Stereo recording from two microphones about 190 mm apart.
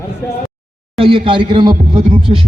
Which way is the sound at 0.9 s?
30° right (ahead or behind).